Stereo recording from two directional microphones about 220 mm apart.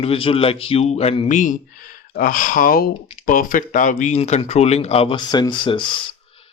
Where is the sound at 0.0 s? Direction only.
25° left (ahead or behind).